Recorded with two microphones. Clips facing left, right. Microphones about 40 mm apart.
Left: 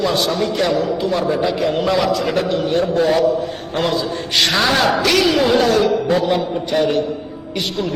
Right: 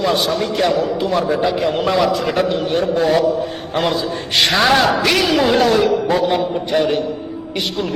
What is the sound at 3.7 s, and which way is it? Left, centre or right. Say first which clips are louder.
A man's voice: even; centre.